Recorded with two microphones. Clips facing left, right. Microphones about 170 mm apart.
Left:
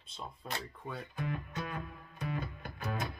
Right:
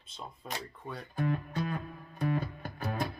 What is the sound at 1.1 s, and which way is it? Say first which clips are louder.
Speech: right 8 dB; 40° right (ahead or behind).